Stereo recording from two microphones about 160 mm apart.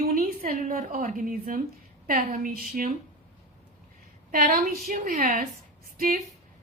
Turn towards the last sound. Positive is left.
turn(degrees=-65)  # may be behind; listen again after turning